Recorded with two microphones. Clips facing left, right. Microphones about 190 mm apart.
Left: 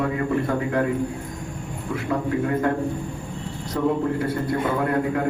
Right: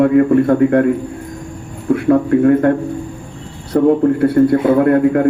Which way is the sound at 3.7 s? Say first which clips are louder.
Right 11 dB; 50° right (ahead or behind).